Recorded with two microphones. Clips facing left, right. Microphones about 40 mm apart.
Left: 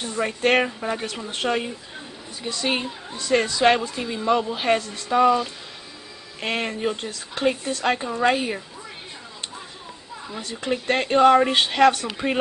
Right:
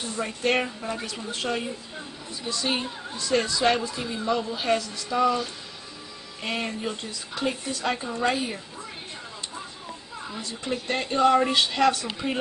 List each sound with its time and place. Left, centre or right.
0.0 s a woman's voice: left
10.7 s speech: left